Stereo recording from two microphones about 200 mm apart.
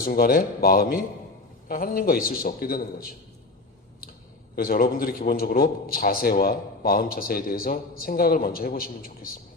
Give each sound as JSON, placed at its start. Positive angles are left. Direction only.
{"t": 0.0, "sound": "a man's voice", "side_deg": 45}
{"t": 4.5, "sound": "a man's voice", "side_deg": 50}